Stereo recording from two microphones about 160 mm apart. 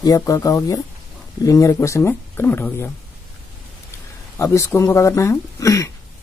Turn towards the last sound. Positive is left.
turn(degrees=20)  # may be behind; listen again after turning